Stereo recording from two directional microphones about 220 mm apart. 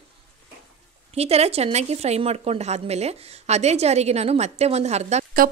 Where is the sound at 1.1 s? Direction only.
30° right (ahead or behind).